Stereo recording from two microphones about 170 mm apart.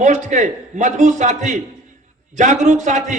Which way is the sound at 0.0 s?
45° right (ahead or behind).